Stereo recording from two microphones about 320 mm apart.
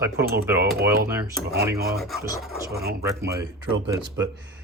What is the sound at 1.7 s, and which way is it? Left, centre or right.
Speech, right.